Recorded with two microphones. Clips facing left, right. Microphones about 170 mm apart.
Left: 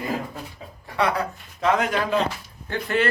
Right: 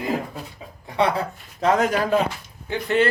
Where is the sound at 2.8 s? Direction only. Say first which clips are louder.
Right 3 dB; 25° right (ahead or behind).